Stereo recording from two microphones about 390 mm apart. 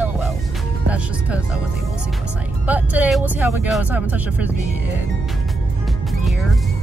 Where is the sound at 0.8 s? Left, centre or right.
Centre.